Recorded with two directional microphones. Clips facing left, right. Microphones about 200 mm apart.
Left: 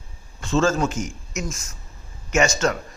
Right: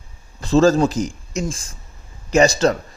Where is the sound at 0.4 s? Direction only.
35° right (ahead or behind).